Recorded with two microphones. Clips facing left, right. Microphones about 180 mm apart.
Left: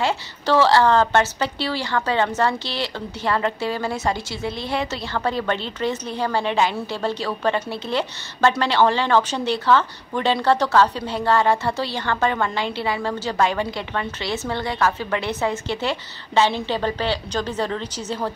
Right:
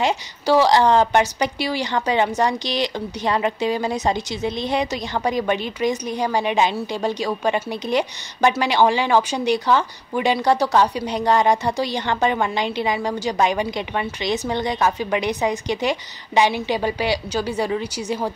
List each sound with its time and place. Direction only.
0.0 s speech: 15° right (ahead or behind)